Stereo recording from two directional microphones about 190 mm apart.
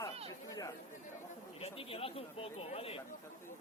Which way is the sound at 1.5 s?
30° left (ahead or behind).